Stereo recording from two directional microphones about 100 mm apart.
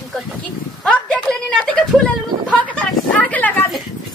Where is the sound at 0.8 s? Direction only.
10° left (ahead or behind).